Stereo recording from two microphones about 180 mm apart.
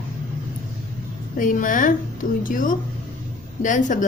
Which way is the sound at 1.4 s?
45° left (ahead or behind).